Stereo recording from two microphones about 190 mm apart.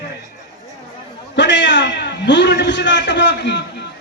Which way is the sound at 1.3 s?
65° left (ahead or behind).